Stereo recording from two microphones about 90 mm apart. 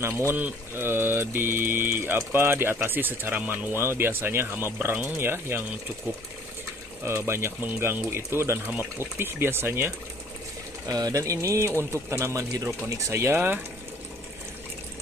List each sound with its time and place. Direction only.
0.0 s mantra: 30° right (ahead or behind)
7.1 s mantra: 30° right (ahead or behind)
10.9 s speech: 45° right (ahead or behind); by 13.6 s 25° right (ahead or behind)